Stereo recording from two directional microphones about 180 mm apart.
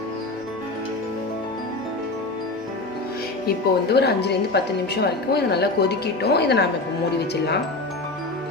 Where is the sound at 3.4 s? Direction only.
65° left (ahead or behind).